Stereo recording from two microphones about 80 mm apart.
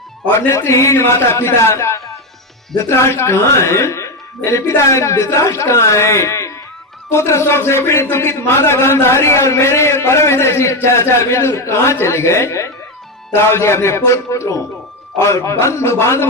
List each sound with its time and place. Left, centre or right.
0.3 s a man's voice: left